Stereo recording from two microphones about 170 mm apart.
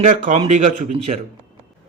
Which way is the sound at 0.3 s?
40° right (ahead or behind).